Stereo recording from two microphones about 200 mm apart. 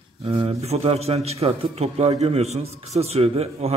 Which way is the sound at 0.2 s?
30° right (ahead or behind).